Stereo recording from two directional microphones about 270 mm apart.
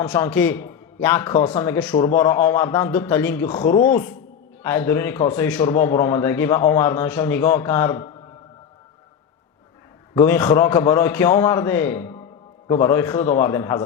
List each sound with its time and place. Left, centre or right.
0.0 s a man's voice: centre
10.2 s a man's voice: centre